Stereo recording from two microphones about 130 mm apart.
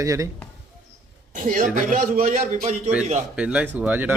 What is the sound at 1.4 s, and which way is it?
A man's voice, 90° right.